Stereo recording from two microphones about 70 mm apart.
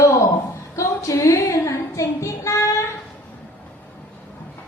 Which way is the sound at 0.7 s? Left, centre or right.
Left.